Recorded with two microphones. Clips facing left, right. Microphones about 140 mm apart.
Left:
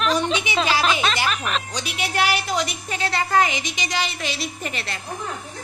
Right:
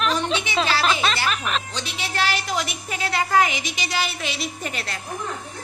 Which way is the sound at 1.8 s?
15° left (ahead or behind).